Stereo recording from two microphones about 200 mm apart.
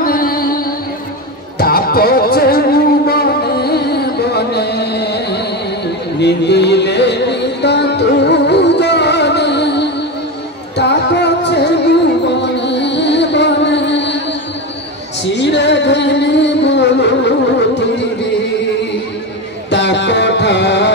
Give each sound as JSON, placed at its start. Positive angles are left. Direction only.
{"t": 0.0, "sound": "music", "side_deg": 45}
{"t": 15.3, "sound": "music", "side_deg": 60}
{"t": 19.7, "sound": "music", "side_deg": 60}